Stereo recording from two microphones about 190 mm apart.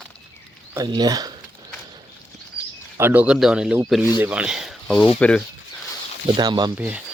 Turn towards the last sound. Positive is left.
turn(degrees=-5)  # may be behind; listen again after turning